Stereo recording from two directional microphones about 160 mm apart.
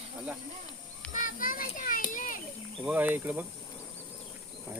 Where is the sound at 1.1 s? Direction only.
55° left (ahead or behind).